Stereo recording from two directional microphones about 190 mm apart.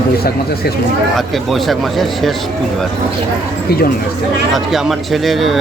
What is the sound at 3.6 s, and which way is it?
Speech, 55° left (ahead or behind).